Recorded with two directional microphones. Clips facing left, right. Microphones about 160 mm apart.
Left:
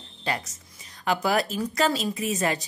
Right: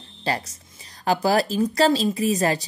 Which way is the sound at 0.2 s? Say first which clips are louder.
Right 4 dB; 35° right (ahead or behind).